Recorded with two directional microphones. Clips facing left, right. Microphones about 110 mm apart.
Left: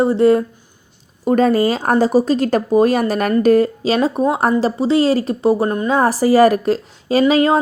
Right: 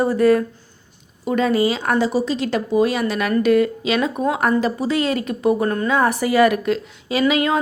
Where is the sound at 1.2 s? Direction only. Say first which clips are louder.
Left 4 dB; 40° left (ahead or behind); by 6.0 s 25° left (ahead or behind).